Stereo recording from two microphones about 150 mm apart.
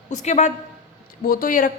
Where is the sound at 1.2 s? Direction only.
70° left (ahead or behind).